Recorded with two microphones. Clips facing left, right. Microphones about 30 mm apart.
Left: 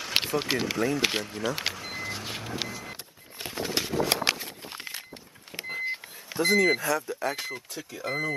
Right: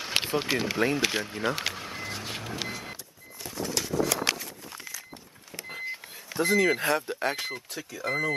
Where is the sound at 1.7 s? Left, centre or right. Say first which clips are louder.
Left 1 dB; centre.